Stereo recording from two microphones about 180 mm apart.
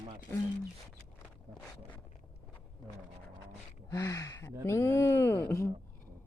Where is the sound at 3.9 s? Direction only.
15° left (ahead or behind).